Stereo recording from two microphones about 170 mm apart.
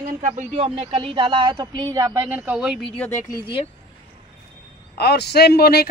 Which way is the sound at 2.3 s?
10° right (ahead or behind).